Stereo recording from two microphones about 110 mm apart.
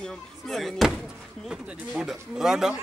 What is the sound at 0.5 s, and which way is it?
A man's voice, centre (ahead or behind).